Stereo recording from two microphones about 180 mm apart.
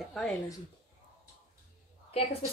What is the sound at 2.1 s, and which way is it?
Speech, 35° left (ahead or behind).